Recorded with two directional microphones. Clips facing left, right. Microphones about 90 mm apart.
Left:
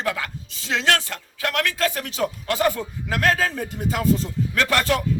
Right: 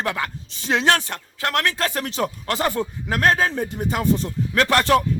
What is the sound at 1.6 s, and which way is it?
Speech, 35° right (ahead or behind).